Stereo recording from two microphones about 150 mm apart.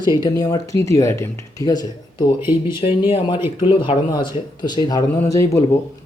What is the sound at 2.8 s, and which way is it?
Speech, 45° left (ahead or behind).